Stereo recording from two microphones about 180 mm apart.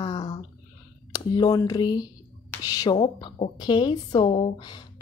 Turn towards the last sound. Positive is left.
turn(degrees=30)  # may be behind; listen again after turning